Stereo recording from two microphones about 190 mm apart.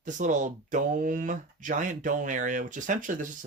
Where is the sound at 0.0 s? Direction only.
40° right (ahead or behind).